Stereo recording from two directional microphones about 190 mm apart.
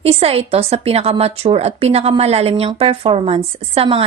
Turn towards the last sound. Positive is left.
turn(degrees=-30)  # may be behind; listen again after turning